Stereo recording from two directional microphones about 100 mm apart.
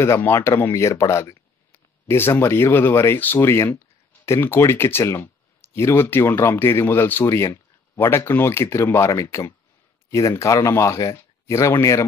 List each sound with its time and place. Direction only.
0.0 s speech: 25° left (ahead or behind)